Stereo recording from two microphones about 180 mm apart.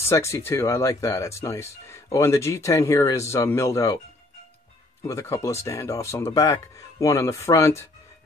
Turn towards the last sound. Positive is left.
turn(degrees=15)  # may be behind; listen again after turning